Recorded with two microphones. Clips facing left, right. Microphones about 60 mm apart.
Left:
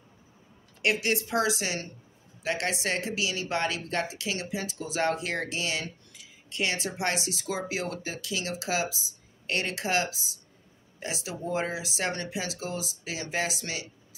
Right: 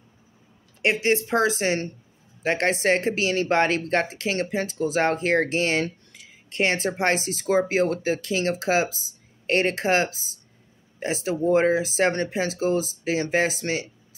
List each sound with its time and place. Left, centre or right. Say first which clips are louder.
0.8 s speech: right 5 dB; right